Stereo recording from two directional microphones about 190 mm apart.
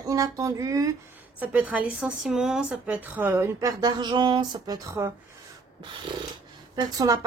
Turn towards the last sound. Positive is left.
turn(degrees=-20)  # may be behind; listen again after turning